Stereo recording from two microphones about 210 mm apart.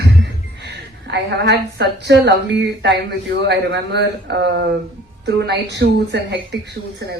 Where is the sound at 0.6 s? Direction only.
50° right (ahead or behind).